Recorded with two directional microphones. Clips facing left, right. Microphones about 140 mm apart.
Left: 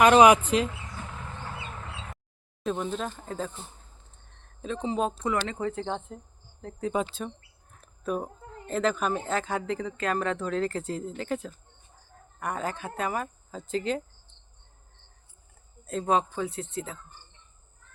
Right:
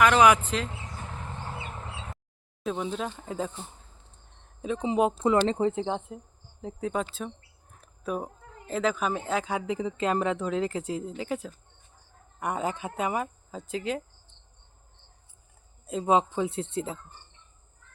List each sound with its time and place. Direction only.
0.0 s speech: 20° left (ahead or behind)
0.7 s bird: 30° right (ahead or behind)
1.9 s a sound: 15° right (ahead or behind)
2.6 s speech: 5° right (ahead or behind)
6.9 s speech: centre (ahead or behind)
15.8 s speech: 15° right (ahead or behind)